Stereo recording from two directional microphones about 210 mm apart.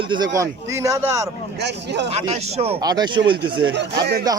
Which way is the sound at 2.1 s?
30° right (ahead or behind).